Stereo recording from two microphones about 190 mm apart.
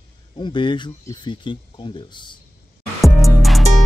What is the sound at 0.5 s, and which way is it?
Speech, 25° left (ahead or behind).